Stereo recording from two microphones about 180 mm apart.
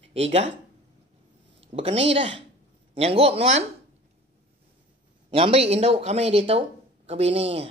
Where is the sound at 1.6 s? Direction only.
35° right (ahead or behind).